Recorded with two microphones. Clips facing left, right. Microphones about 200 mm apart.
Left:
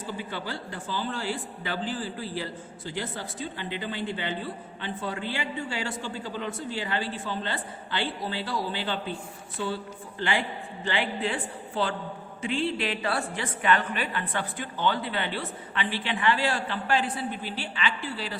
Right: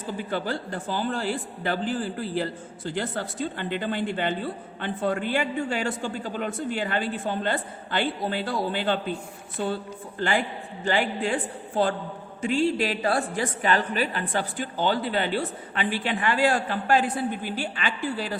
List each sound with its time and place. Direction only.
0.3 s a man's voice: 50° right (ahead or behind)
10.2 s a man's voice: 45° right (ahead or behind)